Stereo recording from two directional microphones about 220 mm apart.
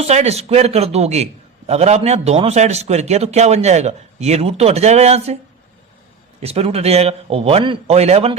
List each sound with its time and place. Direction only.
0.0 s a man's voice: 30° right (ahead or behind)
6.4 s a man's voice: 30° right (ahead or behind)